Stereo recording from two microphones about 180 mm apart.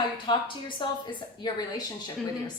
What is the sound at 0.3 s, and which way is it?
Speech, 25° left (ahead or behind).